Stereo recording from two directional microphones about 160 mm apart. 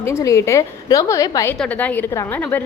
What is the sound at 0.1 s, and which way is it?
A woman's voice, 20° left (ahead or behind).